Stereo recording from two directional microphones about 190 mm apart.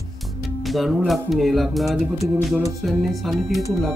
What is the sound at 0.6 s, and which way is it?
Speech, centre (ahead or behind).